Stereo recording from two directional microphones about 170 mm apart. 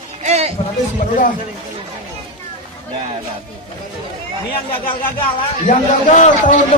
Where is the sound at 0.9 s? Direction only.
50° left (ahead or behind).